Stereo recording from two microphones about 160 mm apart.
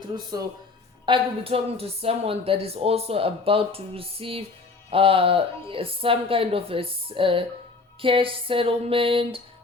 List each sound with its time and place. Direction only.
0.3 s speech: 25° right (ahead or behind)